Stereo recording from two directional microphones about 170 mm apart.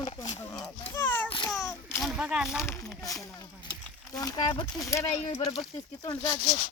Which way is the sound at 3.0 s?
20° left (ahead or behind).